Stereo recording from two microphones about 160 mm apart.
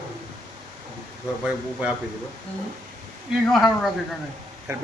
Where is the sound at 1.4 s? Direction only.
10° right (ahead or behind).